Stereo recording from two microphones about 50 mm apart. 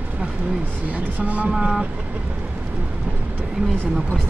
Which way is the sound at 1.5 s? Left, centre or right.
Centre.